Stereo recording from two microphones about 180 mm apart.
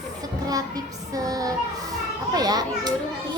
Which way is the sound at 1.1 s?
20° right (ahead or behind).